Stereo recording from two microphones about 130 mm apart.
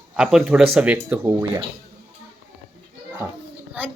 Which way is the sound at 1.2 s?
25° right (ahead or behind).